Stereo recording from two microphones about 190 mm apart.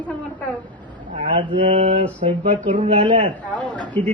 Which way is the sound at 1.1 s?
25° right (ahead or behind).